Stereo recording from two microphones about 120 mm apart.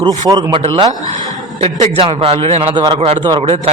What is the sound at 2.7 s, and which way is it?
Speech, 40° right (ahead or behind).